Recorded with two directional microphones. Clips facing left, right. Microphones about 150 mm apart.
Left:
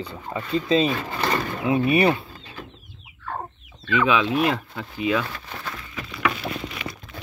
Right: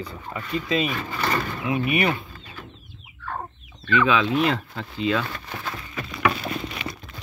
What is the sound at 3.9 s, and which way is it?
Speech, 10° left (ahead or behind).